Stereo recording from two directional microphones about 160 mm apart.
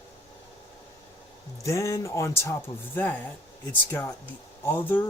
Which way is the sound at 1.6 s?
20° left (ahead or behind).